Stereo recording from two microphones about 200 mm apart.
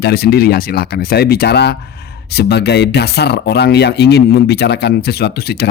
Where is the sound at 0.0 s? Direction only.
50° left (ahead or behind).